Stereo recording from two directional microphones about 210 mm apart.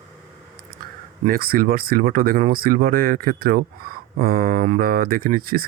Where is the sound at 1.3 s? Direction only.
45° right (ahead or behind).